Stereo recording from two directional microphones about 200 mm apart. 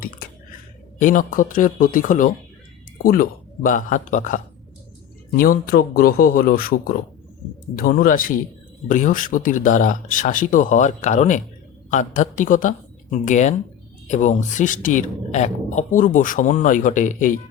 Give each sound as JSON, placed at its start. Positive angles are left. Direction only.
{"t": 0.9, "sound": "a man's voice", "side_deg": 40}